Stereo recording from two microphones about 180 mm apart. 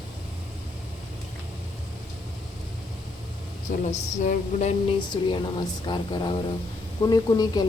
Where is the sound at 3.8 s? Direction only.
40° left (ahead or behind).